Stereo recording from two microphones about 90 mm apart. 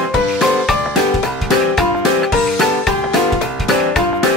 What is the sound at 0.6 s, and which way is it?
Music, centre (ahead or behind).